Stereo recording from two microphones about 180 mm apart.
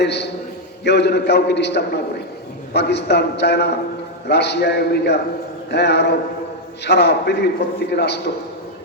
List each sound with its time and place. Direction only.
0.0 s a man's voice: 70° left (ahead or behind)